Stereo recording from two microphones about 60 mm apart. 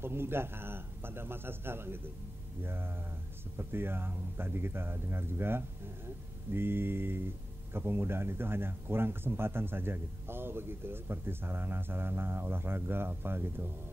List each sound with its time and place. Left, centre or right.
0.0 s speech: right